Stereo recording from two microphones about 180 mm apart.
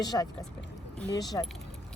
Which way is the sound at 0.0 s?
20° left (ahead or behind).